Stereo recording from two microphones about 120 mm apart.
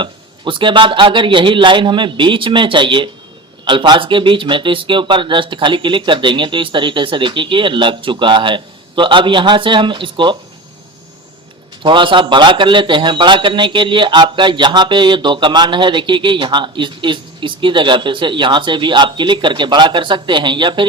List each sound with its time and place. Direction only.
0.0 s speech: 40° right (ahead or behind)
11.8 s speech: 40° right (ahead or behind)